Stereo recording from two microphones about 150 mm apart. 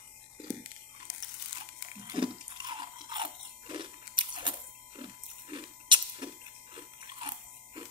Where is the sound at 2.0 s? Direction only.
25° right (ahead or behind).